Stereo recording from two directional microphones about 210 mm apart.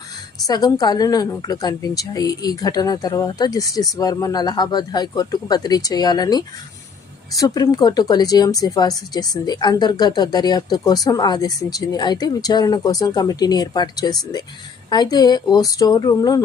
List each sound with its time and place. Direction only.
0.4 s a woman's voice: 20° left (ahead or behind)